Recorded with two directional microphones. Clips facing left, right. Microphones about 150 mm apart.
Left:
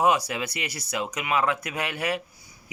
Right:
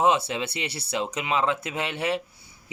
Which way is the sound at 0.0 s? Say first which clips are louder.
Right 1 dB; 25° right (ahead or behind).